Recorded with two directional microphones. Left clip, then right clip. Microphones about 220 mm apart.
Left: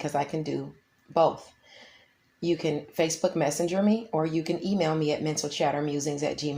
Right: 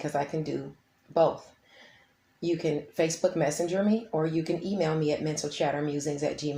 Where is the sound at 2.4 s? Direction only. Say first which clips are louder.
Left 1 dB; 25° left (ahead or behind).